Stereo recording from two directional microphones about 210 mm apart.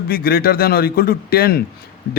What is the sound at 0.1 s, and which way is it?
A man's voice, 45° left (ahead or behind).